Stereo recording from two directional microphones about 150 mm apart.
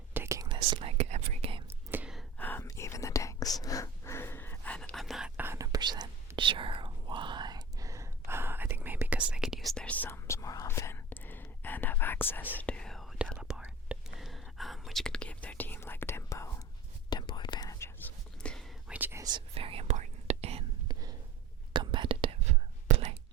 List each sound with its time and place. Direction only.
0.1 s whispering: 15° right (ahead or behind)
0.4 s whispering: 30° right (ahead or behind)
0.8 s whispering: 45° right (ahead or behind)
1.9 s sigh: 10° right (ahead or behind)
2.4 s whispering: 15° left (ahead or behind)
5.4 s whispering: 20° right (ahead or behind); by 18.6 s 10° left (ahead or behind)
18.9 s whispering: 10° right (ahead or behind)
19.2 s whispering: 35° right (ahead or behind)
20.8 s whispering: 25° right (ahead or behind); by 23.1 s 45° right (ahead or behind)